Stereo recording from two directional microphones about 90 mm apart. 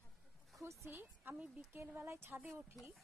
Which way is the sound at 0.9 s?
20° right (ahead or behind).